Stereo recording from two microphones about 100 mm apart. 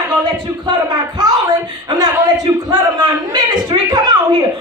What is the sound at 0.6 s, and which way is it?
Speech, 45° right (ahead or behind).